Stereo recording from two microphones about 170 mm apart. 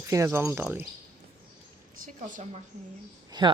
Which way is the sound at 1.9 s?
50° right (ahead or behind).